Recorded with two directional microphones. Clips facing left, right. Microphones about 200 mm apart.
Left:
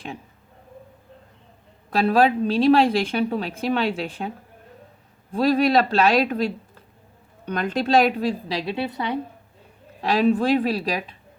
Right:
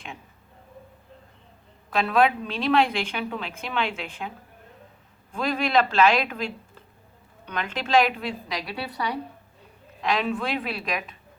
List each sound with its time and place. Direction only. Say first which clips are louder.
1.9 s a woman's voice: left 3 dB; 35° left (ahead or behind)
5.3 s a woman's voice: left 6 dB; 35° left (ahead or behind)
10.0 s a woman's voice: left 7 dB; 35° left (ahead or behind)